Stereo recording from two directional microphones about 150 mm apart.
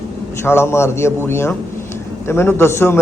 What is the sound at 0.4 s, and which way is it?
A man's voice, 15° left (ahead or behind).